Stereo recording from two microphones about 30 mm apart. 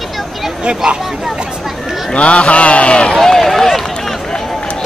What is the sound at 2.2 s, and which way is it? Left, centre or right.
Speech, left.